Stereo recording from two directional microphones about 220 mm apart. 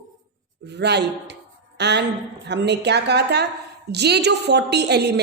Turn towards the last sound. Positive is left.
turn(degrees=-50)  # may be behind; listen again after turning